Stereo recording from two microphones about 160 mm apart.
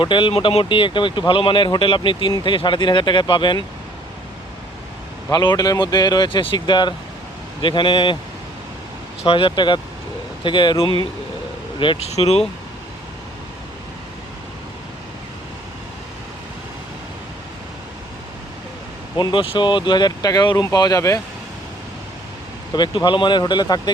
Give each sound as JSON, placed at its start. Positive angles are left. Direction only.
{"t": 0.0, "sound": "speech", "side_deg": 30}
{"t": 5.3, "sound": "speech", "side_deg": 25}
{"t": 9.2, "sound": "speech", "side_deg": 35}
{"t": 19.1, "sound": "speech", "side_deg": 30}
{"t": 22.7, "sound": "speech", "side_deg": 25}